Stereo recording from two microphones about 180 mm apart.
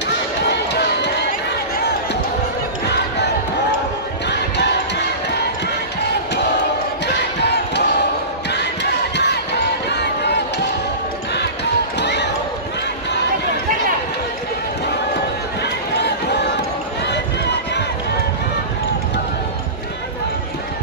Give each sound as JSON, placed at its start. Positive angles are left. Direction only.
{"t": 0.5, "sound": "run", "side_deg": 70}
{"t": 4.3, "sound": "basketball bounce", "side_deg": 70}
{"t": 7.1, "sound": "battle cry", "side_deg": 70}
{"t": 9.1, "sound": "crowd", "side_deg": 70}
{"t": 12.0, "sound": "basketball bounce", "side_deg": 70}
{"t": 15.6, "sound": "run", "side_deg": 70}